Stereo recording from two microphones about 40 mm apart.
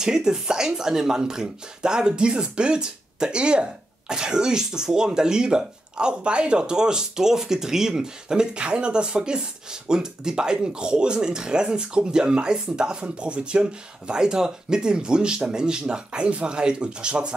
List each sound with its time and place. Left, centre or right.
0.0 s speech: centre